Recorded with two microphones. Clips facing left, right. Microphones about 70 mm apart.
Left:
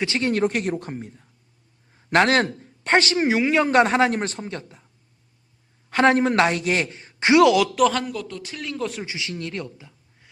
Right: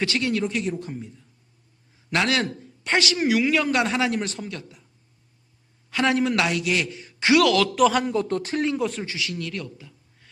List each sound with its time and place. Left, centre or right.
0.2 s a man's voice: left
0.4 s a woman's voice: left
5.9 s a man's voice: left
7.8 s speech: centre
8.0 s speech: right
8.8 s speech: centre
9.0 s speech: left